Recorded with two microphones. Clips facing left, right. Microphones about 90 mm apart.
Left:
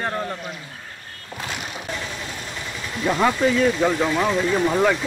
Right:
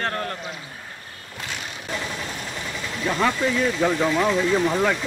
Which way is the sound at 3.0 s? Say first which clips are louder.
Left 3 dB; 15° left (ahead or behind).